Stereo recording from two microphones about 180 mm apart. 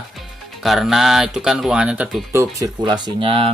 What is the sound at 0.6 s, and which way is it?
Speech, centre (ahead or behind).